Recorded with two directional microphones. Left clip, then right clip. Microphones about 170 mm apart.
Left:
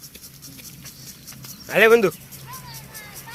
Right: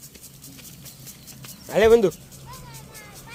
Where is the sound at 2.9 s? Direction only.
60° right (ahead or behind).